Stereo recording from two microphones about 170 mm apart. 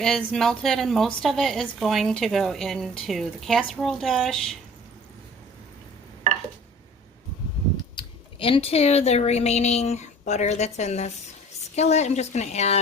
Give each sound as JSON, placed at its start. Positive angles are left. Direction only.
{"t": 0.0, "sound": "a woman's voice", "side_deg": 0}
{"t": 7.9, "sound": "speech", "side_deg": 30}